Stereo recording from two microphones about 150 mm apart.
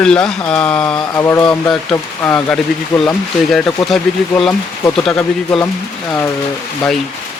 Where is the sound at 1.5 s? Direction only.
5° left (ahead or behind).